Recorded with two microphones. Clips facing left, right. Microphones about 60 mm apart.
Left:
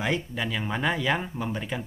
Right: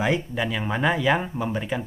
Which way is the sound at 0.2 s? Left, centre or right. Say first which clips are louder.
Right 4 dB; centre.